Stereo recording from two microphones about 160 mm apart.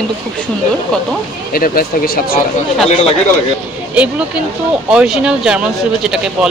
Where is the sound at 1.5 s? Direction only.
70° left (ahead or behind).